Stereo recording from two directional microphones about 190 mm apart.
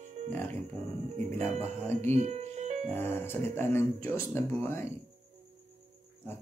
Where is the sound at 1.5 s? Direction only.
35° right (ahead or behind).